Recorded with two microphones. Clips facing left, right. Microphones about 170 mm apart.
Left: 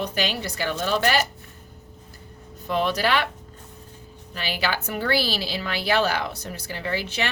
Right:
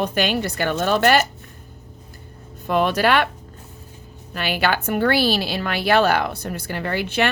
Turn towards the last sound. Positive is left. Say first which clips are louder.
# right 5 dB
turn(degrees=-60)  # may be behind; listen again after turning